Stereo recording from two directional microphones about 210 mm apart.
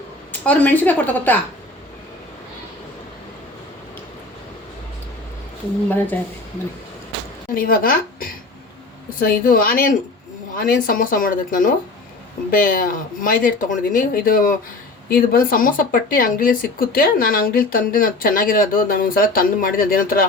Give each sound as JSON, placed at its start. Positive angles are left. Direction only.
{"t": 0.4, "sound": "a woman's voice", "side_deg": 10}
{"t": 7.5, "sound": "speech", "side_deg": 45}
{"t": 9.4, "sound": "speech", "side_deg": 45}